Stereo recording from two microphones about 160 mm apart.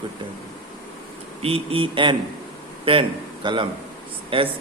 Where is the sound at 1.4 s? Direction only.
40° right (ahead or behind).